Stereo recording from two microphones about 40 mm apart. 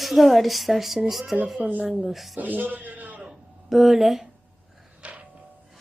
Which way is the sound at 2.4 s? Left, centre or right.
Right.